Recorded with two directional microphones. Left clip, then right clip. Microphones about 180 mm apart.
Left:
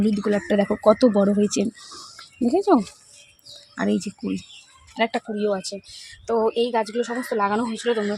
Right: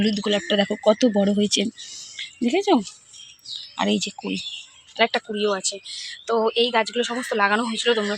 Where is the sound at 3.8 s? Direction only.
10° right (ahead or behind).